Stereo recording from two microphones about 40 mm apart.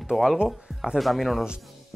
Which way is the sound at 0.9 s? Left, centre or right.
Centre.